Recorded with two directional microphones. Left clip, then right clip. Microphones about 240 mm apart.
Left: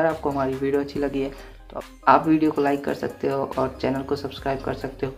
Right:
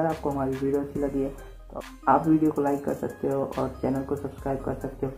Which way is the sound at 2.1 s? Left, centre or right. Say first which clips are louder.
Left 4 dB; left.